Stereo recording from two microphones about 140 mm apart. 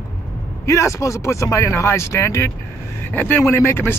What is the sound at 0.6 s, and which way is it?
Speech, 20° left (ahead or behind).